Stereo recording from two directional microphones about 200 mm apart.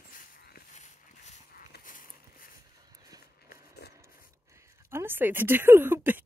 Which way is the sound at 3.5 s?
55° left (ahead or behind).